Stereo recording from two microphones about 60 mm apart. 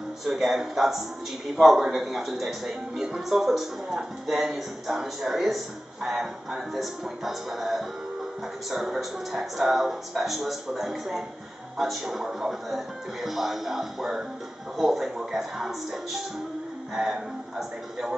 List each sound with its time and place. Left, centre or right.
0.2 s speech: centre